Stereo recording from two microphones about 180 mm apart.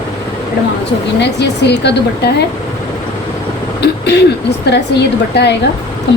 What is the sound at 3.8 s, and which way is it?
Speech, 65° left (ahead or behind).